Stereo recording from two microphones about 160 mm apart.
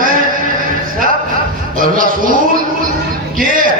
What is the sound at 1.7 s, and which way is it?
Speech, 60° right (ahead or behind).